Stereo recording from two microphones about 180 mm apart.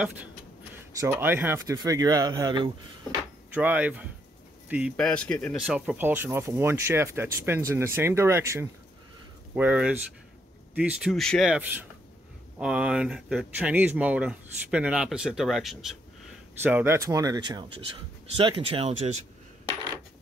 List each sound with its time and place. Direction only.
1.0 s speech: 10° right (ahead or behind)
3.5 s speech: 10° right (ahead or behind)
4.9 s speech: 5° left (ahead or behind)
16.6 s speech: 10° right (ahead or behind); by 19.0 s 35° right (ahead or behind)